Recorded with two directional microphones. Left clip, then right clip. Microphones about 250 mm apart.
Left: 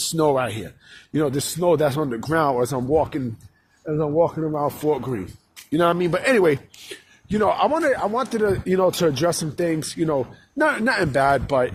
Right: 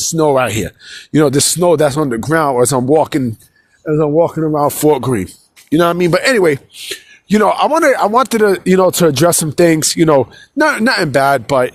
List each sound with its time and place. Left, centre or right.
0.0 s speech: right
0.3 s a man's voice: right